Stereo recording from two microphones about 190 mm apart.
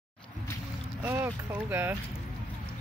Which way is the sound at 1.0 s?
15° right (ahead or behind).